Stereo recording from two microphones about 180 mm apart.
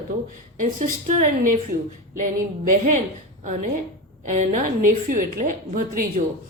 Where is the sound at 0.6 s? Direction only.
45° right (ahead or behind).